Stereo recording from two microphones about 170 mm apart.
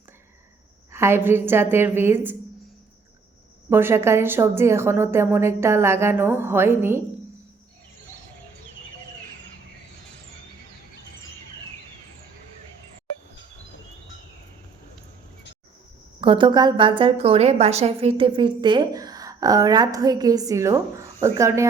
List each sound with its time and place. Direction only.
0.9 s a woman's voice: 15° right (ahead or behind)
3.7 s a woman's voice: 15° right (ahead or behind)
16.2 s a woman's voice: 30° right (ahead or behind)